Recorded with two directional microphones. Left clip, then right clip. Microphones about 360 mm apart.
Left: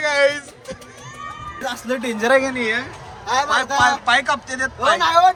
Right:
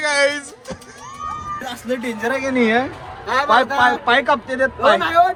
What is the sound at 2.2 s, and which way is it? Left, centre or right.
Speech, left.